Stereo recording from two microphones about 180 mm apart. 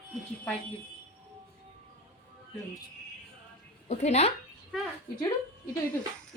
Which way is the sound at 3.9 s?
40° left (ahead or behind).